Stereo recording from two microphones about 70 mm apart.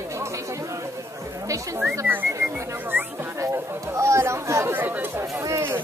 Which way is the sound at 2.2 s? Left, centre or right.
Right.